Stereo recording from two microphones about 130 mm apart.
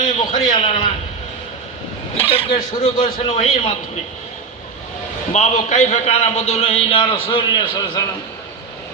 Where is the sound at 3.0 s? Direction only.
50° left (ahead or behind).